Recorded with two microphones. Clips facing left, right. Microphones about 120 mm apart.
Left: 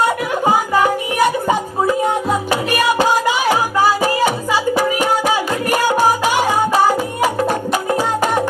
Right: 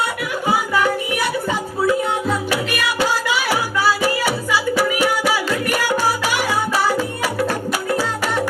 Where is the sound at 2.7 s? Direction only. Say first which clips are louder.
Left 9 dB; 45° left (ahead or behind).